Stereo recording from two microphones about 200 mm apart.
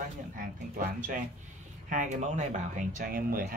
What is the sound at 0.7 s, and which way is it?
Speech, 45° right (ahead or behind).